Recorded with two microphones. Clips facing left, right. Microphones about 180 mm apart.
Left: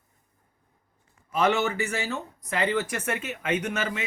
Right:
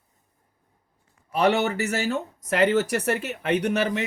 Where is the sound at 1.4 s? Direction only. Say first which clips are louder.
Right 3 dB; 40° right (ahead or behind).